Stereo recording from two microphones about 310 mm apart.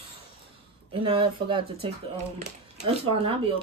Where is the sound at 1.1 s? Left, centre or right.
Centre.